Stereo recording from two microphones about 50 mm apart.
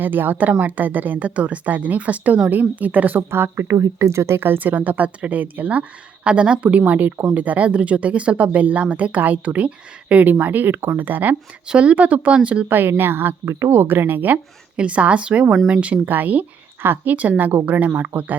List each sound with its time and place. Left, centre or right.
0.0 s speech: right
3.2 s speech: right
11.7 s speech: right
12.6 s speech: right
13.4 s speech: right
13.7 s speech: right
14.8 s speech: right
16.0 s speech: right